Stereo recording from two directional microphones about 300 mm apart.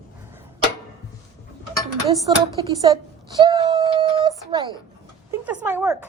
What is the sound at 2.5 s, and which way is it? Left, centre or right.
Speech, centre.